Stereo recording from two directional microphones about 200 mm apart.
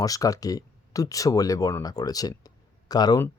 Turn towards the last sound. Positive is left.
turn(degrees=20)  # may be behind; listen again after turning